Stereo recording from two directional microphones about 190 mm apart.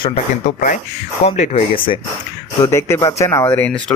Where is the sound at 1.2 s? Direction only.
35° left (ahead or behind).